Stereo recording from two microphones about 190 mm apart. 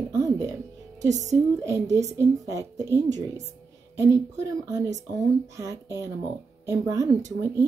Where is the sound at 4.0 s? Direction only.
15° right (ahead or behind).